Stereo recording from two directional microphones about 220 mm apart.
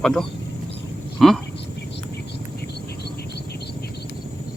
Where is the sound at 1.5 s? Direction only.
50° left (ahead or behind).